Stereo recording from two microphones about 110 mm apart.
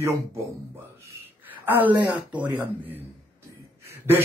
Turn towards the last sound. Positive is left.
turn(degrees=-20)  # may be behind; listen again after turning